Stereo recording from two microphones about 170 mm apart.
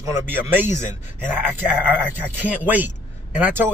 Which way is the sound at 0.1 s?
10° right (ahead or behind).